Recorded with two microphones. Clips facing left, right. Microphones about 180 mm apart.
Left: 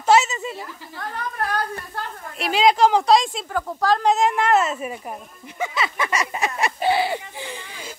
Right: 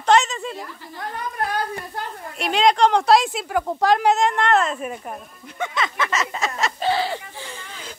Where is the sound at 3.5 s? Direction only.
20° right (ahead or behind).